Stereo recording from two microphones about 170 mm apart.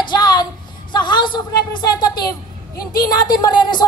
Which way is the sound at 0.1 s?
25° left (ahead or behind).